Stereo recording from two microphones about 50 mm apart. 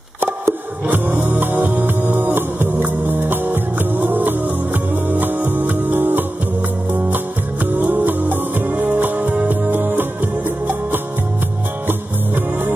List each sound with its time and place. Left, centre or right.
0.8 s music: right
1.4 s music: right